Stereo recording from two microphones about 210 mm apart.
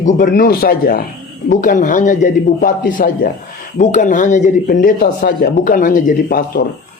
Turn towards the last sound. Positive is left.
turn(degrees=45)  # may be behind; listen again after turning